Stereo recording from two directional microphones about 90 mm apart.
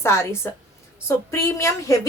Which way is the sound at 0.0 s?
30° left (ahead or behind).